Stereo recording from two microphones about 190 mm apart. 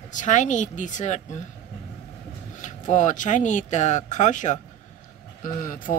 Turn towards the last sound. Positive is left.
turn(degrees=45)  # may be behind; listen again after turning